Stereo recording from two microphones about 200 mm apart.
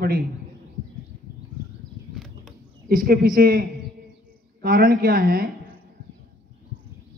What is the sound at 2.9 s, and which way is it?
Speech, 45° right (ahead or behind).